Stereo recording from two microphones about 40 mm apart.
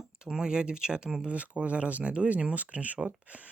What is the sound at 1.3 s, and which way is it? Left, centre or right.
Speech, right.